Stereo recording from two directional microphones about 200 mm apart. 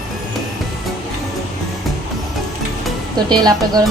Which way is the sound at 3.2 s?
20° right (ahead or behind).